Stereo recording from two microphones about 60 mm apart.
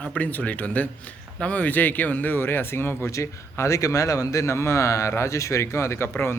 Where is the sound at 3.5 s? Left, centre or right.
Left.